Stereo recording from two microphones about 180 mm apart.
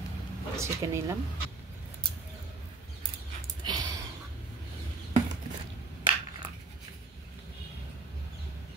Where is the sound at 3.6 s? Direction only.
20° right (ahead or behind).